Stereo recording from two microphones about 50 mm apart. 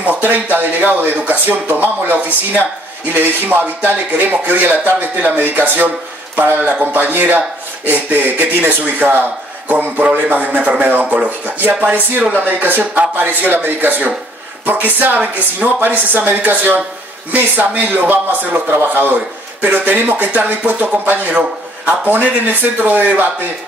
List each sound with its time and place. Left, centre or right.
0.0 s speech: right
10.0 s speech: right